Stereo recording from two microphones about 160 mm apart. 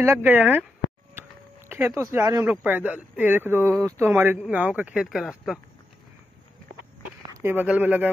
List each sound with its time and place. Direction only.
0.0 s speech: 15° right (ahead or behind)
1.7 s speech: 15° right (ahead or behind)
2.6 s speech: 10° right (ahead or behind)
7.4 s speech: 10° right (ahead or behind)